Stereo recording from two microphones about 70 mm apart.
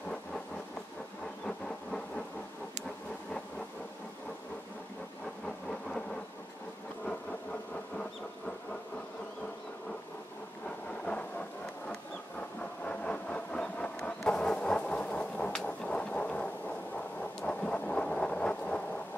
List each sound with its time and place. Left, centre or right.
1.4 s thunder: centre
5.7 s thunder: centre
11.1 s thunder: centre
12.4 s a sound: centre
17.4 s rain: centre